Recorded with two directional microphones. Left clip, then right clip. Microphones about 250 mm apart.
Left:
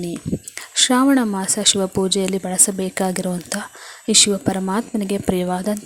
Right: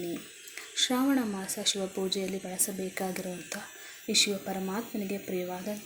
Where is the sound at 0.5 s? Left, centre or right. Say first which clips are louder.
Left 12 dB; left.